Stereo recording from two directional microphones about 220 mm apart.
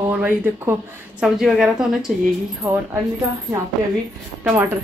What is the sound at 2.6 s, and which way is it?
Speech, 15° right (ahead or behind).